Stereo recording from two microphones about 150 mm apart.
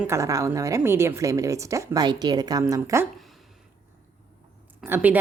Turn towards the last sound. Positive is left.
turn(degrees=-15)  # may be behind; listen again after turning